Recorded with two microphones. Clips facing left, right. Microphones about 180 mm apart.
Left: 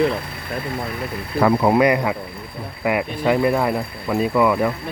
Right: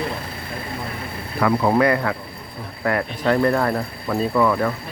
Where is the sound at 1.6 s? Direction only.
15° left (ahead or behind).